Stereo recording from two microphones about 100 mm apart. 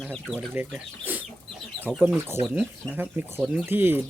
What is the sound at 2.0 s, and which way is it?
Speech, 15° right (ahead or behind).